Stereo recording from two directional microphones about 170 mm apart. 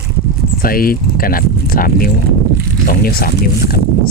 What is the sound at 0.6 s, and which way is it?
Speech, 60° left (ahead or behind).